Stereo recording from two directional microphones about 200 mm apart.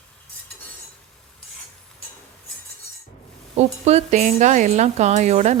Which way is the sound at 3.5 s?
30° right (ahead or behind).